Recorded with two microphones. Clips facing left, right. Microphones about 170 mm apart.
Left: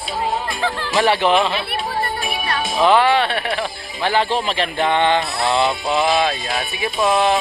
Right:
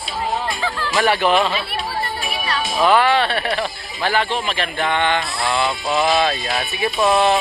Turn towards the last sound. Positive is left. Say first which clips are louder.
# right 1 dB
turn(degrees=15)  # may be behind; listen again after turning